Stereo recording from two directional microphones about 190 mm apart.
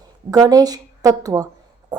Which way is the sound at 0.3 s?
20° right (ahead or behind).